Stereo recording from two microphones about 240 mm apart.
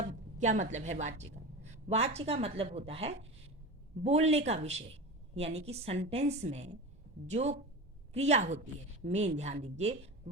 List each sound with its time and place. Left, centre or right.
0.0 s a woman's voice: right